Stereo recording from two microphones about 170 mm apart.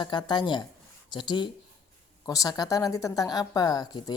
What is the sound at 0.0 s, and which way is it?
Speech, 25° left (ahead or behind).